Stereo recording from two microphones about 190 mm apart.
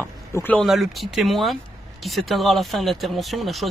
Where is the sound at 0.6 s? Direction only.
Centre (ahead or behind).